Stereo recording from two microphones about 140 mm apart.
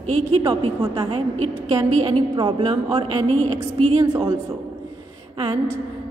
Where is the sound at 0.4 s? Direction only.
40° right (ahead or behind).